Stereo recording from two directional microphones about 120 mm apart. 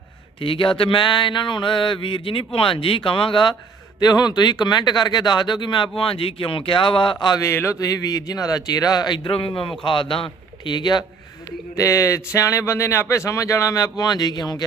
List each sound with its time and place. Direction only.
0.4 s speech: 45° left (ahead or behind)
11.8 s speech: 25° left (ahead or behind)